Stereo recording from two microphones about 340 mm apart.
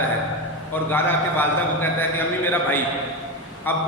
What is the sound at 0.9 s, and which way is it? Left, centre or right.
A man's voice, centre.